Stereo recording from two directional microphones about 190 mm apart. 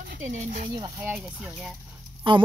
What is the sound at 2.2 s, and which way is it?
Speech, 25° right (ahead or behind).